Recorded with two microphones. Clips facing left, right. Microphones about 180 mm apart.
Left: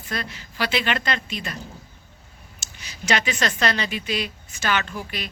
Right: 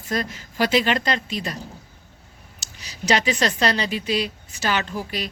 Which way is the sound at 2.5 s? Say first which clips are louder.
Right 3 dB; 35° right (ahead or behind).